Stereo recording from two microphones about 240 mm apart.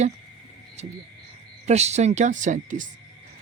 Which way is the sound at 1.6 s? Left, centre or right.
Right.